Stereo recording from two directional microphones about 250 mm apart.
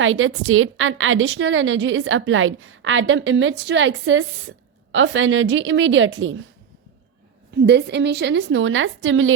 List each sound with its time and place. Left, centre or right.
0.0 s a woman's voice: right
7.6 s a woman's voice: right